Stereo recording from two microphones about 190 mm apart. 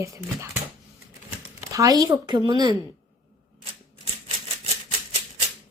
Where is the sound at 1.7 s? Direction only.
20° right (ahead or behind).